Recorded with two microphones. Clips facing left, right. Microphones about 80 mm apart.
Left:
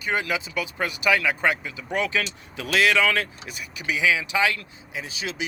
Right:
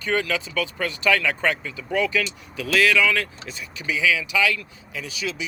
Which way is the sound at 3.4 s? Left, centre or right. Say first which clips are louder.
Right 1 dB; centre.